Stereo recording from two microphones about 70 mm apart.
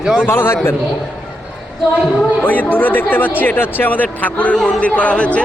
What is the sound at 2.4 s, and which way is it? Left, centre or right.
Speech, left.